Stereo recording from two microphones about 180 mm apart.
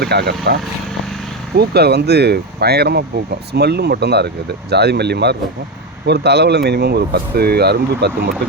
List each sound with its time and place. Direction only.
0.0 s speech: 65° right (ahead or behind)
1.5 s speech: 65° right (ahead or behind)